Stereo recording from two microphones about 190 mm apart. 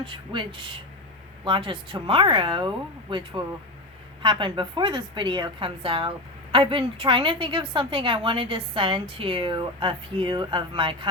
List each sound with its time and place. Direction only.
0.0 s a woman's voice: 25° right (ahead or behind)